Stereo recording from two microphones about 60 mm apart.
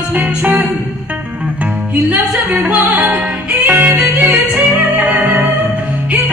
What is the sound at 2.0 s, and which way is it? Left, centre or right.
Music, right.